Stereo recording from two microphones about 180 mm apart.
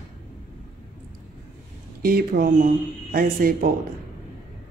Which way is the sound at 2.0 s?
55° right (ahead or behind).